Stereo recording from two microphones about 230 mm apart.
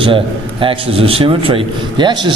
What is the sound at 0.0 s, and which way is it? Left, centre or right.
A man's voice, right.